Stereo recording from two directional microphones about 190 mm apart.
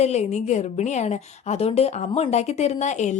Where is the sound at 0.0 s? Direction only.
35° left (ahead or behind).